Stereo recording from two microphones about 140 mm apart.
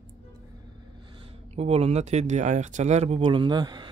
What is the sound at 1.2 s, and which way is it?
Speech, 45° right (ahead or behind).